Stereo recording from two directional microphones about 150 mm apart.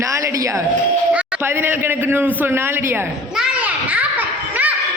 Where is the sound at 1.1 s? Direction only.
10° right (ahead or behind).